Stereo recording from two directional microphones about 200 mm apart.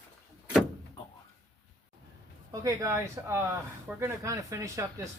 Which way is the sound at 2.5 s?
15° right (ahead or behind).